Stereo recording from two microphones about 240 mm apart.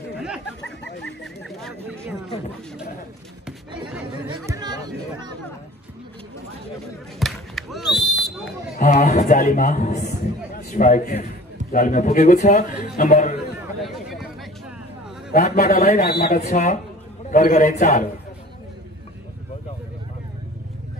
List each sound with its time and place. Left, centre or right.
0.1 s chatter: centre
1.0 s a sound: centre
4.3 s chatter: centre
7.2 s basketball bounce: centre
8.7 s a man's voice: left
13.8 s a sound: centre
15.3 s a man's voice: left